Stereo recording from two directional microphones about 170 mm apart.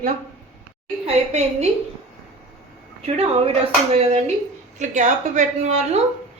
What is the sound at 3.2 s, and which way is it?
A woman's voice, 35° right (ahead or behind).